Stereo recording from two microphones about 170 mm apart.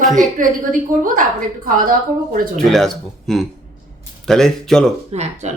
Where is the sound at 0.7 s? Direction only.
55° right (ahead or behind).